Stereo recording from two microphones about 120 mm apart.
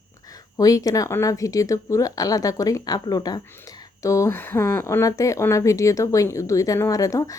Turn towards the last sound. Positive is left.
turn(degrees=30)  # may be behind; listen again after turning